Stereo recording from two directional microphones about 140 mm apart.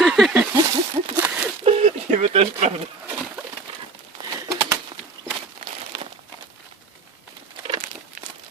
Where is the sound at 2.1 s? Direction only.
45° right (ahead or behind).